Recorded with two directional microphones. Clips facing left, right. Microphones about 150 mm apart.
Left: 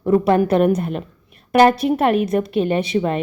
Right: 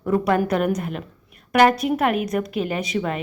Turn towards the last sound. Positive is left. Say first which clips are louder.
# left 5 dB
turn(degrees=30)  # may be behind; listen again after turning